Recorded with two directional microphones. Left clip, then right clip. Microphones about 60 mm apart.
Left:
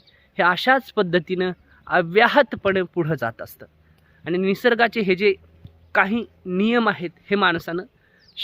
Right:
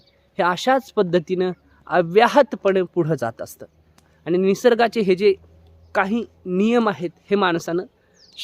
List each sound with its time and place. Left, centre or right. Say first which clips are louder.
0.3 s speech: left 1 dB; right; by 7.9 s centre